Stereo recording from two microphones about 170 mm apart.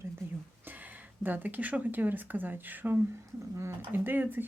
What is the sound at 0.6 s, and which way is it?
Speech, 10° right (ahead or behind).